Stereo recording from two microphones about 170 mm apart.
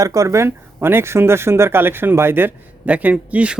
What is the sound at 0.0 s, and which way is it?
Speech, 20° right (ahead or behind).